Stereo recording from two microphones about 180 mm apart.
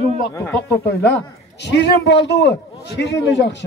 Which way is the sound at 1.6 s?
70° left (ahead or behind).